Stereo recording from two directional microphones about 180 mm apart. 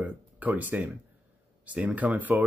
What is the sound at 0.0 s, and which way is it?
Speech, 10° right (ahead or behind).